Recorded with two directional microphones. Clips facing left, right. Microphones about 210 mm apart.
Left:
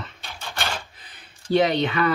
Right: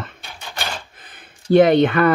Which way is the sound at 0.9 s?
50° right (ahead or behind).